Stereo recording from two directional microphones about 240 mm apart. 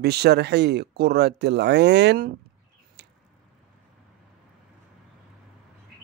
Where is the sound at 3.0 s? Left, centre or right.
Right.